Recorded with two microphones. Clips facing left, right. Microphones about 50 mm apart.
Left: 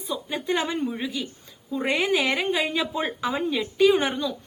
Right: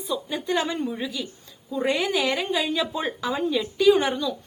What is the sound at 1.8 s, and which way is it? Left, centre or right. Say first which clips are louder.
A woman's voice: even; left.